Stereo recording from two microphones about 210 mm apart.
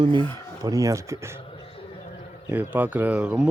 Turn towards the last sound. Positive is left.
turn(degrees=-5)  # may be behind; listen again after turning